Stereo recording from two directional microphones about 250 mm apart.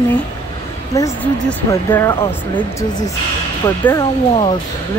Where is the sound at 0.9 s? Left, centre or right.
Centre.